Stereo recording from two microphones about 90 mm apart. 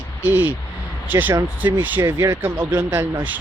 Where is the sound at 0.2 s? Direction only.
20° right (ahead or behind).